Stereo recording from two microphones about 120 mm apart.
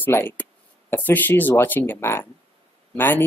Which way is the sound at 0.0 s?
15° left (ahead or behind).